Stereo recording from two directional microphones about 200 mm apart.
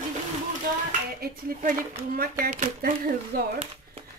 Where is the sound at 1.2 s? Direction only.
45° right (ahead or behind).